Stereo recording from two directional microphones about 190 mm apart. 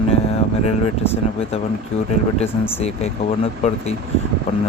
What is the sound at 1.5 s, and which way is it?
Speech, 30° left (ahead or behind).